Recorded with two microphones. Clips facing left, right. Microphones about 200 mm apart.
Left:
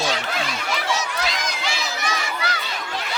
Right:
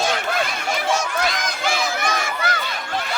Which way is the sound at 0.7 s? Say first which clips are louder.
Right 4 dB; 50° right (ahead or behind).